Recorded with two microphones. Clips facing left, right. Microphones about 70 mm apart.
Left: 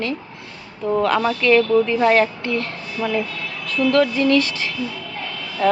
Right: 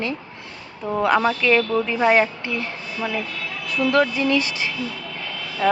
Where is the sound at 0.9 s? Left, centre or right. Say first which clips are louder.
Left 2 dB; centre.